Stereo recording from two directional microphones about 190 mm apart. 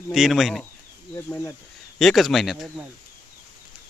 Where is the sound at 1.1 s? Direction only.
10° left (ahead or behind).